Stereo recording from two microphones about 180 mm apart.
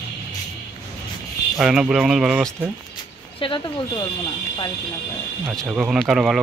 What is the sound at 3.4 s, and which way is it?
Speech, 25° left (ahead or behind).